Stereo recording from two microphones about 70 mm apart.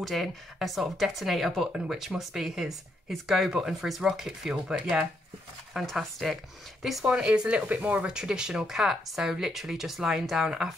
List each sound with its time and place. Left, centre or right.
0.0 s speech: centre
5.8 s speech: centre
7.1 s speech: centre